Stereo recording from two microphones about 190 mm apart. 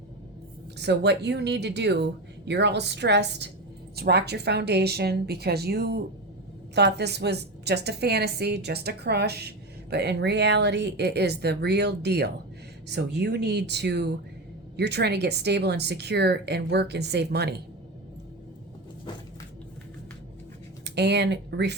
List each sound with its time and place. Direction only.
0.8 s a woman's voice: 60° right (ahead or behind)
20.8 s speech: 65° right (ahead or behind)